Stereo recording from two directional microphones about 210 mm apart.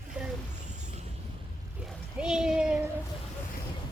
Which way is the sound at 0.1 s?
5° right (ahead or behind).